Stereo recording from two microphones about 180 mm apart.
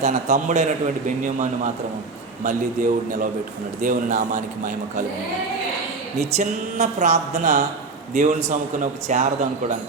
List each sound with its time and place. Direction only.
0.0 s a man's voice: 40° right (ahead or behind)
6.1 s a man's voice: 40° right (ahead or behind)